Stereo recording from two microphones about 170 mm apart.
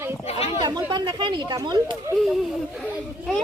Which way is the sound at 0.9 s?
25° right (ahead or behind).